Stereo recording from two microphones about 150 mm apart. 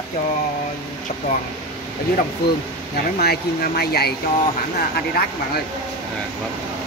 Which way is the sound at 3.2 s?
90° left.